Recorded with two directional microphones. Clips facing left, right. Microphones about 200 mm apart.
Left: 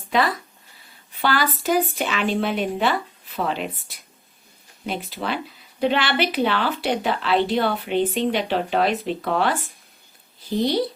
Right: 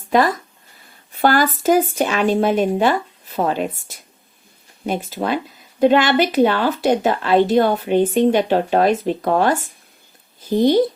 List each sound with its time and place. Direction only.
0.1 s speech: 45° right (ahead or behind)